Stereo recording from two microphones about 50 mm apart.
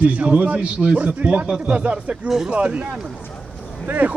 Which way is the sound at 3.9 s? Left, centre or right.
Right.